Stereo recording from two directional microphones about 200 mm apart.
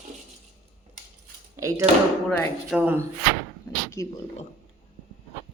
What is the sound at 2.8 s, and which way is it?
Speech, 10° right (ahead or behind).